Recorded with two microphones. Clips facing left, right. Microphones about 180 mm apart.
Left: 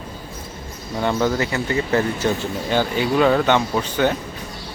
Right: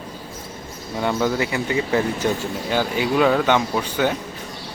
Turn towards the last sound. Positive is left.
turn(degrees=-10)  # may be behind; listen again after turning